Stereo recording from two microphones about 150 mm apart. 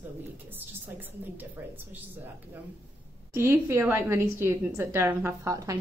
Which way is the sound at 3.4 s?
15° right (ahead or behind).